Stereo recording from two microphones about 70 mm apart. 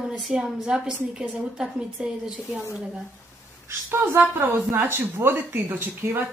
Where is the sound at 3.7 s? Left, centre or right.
Right.